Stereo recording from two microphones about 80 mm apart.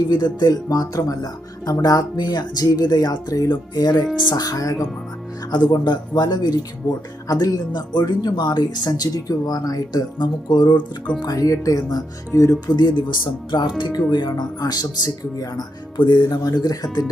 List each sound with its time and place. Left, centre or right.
0.1 s speech: left
3.5 s speech: left
4.4 s speech: left
5.5 s speech: left
10.8 s speech: centre
11.2 s speech: left
12.3 s speech: left
12.6 s speech: left
14.1 s speech: left
16.0 s music: left
16.4 s speech: left